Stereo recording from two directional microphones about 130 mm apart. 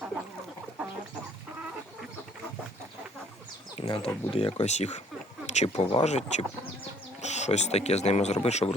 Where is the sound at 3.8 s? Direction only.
40° left (ahead or behind).